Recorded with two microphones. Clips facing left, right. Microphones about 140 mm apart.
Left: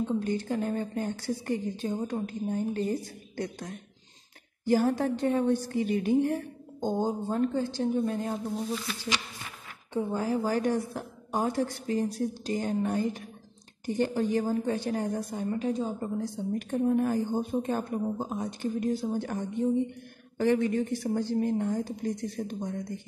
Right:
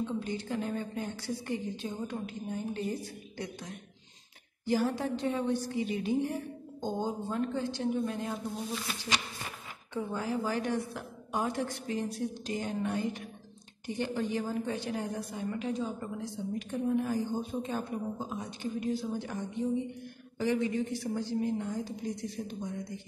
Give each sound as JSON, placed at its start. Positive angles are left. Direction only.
{"t": 0.0, "sound": "a woman's voice", "side_deg": 45}
{"t": 9.9, "sound": "a woman's voice", "side_deg": 35}